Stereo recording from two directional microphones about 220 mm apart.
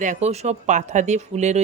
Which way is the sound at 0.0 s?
30° right (ahead or behind).